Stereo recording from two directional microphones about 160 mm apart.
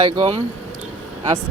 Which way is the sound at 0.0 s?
35° right (ahead or behind).